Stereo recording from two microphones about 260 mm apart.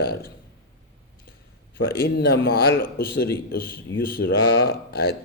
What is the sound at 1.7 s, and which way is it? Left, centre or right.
A man's voice, left.